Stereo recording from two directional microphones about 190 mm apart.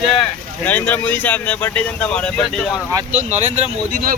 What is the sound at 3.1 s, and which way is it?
Speech, 35° right (ahead or behind).